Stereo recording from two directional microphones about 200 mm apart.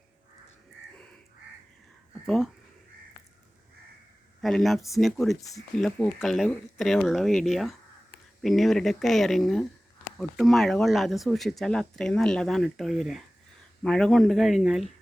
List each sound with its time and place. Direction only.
2.2 s speech: centre (ahead or behind)
4.4 s speech: centre (ahead or behind)
5.4 s speech: 15° left (ahead or behind)
5.7 s speech: 5° left (ahead or behind)